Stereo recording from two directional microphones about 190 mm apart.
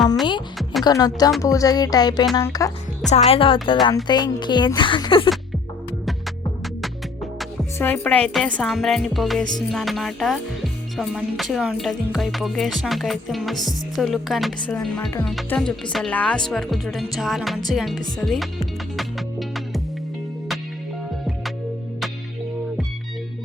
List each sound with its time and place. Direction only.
0.6 s music: centre (ahead or behind)
0.9 s speech: 20° left (ahead or behind)
3.1 s speech: 30° left (ahead or behind)
7.8 s speech: 10° left (ahead or behind)
18.2 s music: centre (ahead or behind)